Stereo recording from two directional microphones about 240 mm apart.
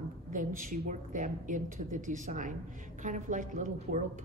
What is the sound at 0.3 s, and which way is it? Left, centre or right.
A woman's voice, right.